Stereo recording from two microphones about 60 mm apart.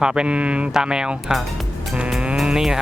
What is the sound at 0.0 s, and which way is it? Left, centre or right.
Speech, centre.